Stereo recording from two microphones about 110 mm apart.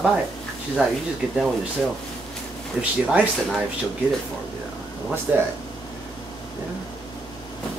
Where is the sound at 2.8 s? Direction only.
5° right (ahead or behind).